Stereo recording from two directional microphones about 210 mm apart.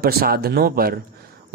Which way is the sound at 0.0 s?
45° right (ahead or behind).